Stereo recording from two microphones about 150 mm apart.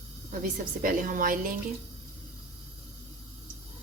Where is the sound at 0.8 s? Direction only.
65° right (ahead or behind).